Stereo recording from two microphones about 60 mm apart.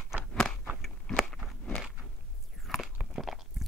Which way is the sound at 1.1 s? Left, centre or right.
Centre.